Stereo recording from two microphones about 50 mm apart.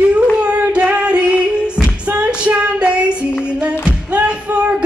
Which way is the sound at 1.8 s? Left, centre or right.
Right.